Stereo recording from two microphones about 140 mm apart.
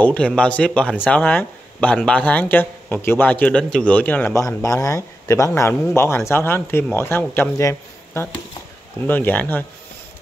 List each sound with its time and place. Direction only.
0.0 s speech: 5° left (ahead or behind)
4.6 s speech: 25° left (ahead or behind)